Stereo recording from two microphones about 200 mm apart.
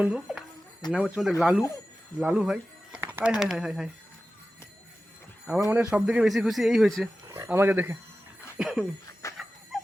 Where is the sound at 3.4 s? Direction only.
Centre (ahead or behind).